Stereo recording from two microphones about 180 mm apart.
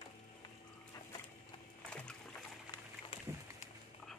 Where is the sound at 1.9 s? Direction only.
5° left (ahead or behind).